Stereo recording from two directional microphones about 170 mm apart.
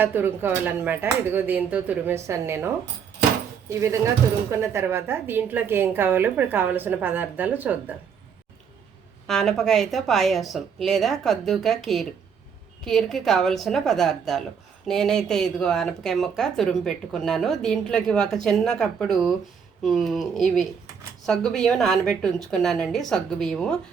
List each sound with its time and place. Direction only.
0.0 s a woman's voice: 10° right (ahead or behind)
9.2 s speech: centre (ahead or behind)